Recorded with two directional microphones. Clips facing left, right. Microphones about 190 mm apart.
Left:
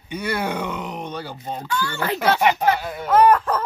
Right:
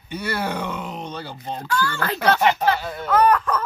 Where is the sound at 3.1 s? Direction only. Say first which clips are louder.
Left 2 dB; 30° left (ahead or behind).